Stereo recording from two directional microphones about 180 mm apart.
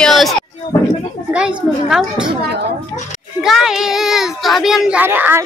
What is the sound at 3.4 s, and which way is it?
A child's voice, centre (ahead or behind).